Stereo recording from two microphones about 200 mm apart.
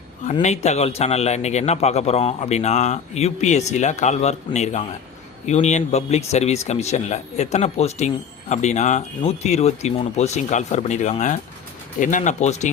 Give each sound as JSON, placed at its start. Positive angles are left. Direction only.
{"t": 0.4, "sound": "speech", "side_deg": 35}